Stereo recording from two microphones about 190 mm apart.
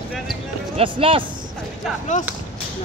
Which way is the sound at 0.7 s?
30° right (ahead or behind).